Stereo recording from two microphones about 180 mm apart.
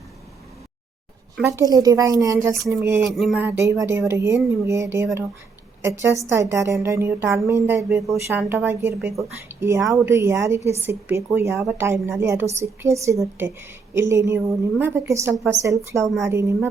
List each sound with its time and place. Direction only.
1.4 s a woman's voice: 15° right (ahead or behind)
3.0 s a sound: centre (ahead or behind)
3.4 s a woman's voice: 15° right (ahead or behind)